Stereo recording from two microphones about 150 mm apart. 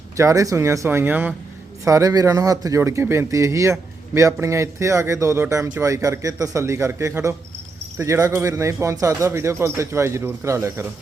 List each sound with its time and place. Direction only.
0.2 s speech: 20° right (ahead or behind)